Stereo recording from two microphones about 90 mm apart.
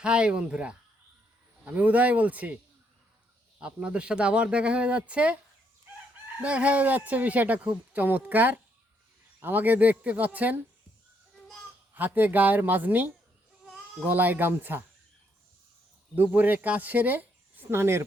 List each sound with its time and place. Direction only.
0.0 s speech: 10° right (ahead or behind)
3.6 s speech: 10° right (ahead or behind)
6.4 s speech: 15° right (ahead or behind)
11.9 s speech: 20° right (ahead or behind)
16.1 s speech: 20° right (ahead or behind)